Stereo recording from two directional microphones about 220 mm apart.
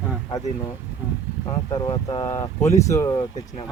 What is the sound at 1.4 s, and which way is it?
Speech, 20° left (ahead or behind).